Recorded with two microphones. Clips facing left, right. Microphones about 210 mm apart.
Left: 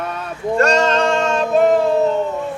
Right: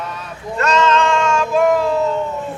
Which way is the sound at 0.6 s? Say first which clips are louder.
Even; 40° left (ahead or behind).